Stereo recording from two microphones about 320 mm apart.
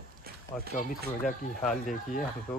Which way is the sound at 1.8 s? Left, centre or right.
Left.